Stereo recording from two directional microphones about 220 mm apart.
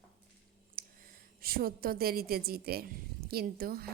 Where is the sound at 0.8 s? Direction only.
40° right (ahead or behind).